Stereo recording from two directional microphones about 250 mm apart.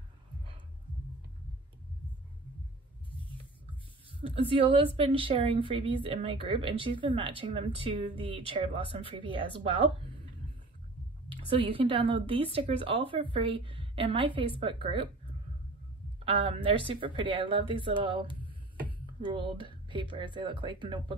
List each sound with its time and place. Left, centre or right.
4.4 s a woman's voice: right
11.2 s a woman's voice: right
16.3 s a woman's voice: right